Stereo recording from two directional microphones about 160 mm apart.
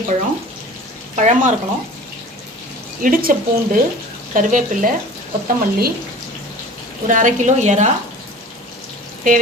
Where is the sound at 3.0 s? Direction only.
60° right (ahead or behind).